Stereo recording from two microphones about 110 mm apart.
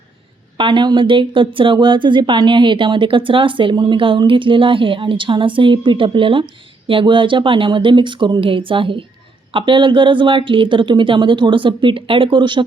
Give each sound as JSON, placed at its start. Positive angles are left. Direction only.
{"t": 0.5, "sound": "speech", "side_deg": -45}